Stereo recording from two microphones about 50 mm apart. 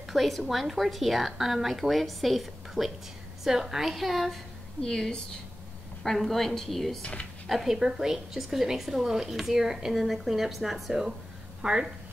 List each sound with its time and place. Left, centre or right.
0.1 s a woman's voice: centre
4.8 s a woman's voice: centre
7.0 s speech: left
7.4 s a woman's voice: centre
11.6 s a woman's voice: centre